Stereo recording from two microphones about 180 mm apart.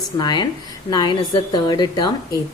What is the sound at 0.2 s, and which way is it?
A woman's voice, 25° left (ahead or behind).